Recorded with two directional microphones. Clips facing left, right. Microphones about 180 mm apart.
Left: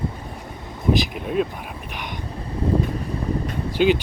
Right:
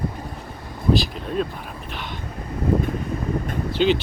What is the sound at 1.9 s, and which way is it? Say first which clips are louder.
Vehicle: right 1 dB; 15° left (ahead or behind).